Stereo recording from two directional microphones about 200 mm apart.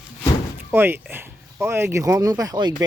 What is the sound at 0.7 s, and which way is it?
Speech, 10° right (ahead or behind).